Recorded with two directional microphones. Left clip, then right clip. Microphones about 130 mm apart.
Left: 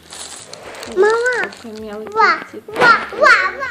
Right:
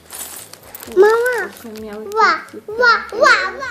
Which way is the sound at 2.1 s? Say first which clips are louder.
Even; 90° right.